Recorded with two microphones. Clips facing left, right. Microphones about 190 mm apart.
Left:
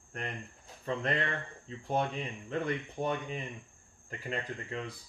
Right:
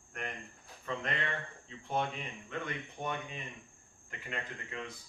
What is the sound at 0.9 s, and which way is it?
Speech, 30° left (ahead or behind).